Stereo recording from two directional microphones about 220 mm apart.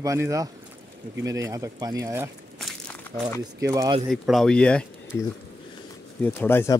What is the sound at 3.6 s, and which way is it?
Speech, 15° right (ahead or behind).